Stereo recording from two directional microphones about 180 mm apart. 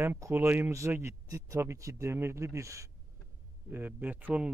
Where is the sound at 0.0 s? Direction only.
15° right (ahead or behind).